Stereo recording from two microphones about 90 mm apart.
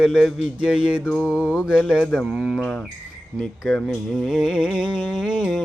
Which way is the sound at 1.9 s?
5° right (ahead or behind).